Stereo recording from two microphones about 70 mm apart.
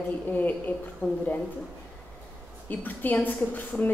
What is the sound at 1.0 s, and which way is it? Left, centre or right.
Speech, centre.